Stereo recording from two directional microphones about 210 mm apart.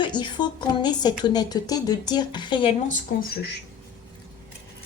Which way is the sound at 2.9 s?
45° left (ahead or behind).